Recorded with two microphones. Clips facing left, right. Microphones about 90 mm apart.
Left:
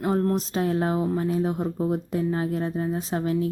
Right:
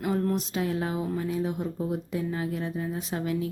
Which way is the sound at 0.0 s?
35° left (ahead or behind).